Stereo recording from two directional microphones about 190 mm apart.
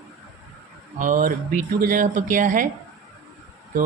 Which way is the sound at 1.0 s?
45° right (ahead or behind).